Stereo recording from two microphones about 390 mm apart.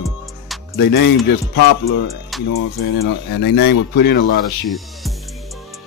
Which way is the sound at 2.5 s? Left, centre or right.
Left.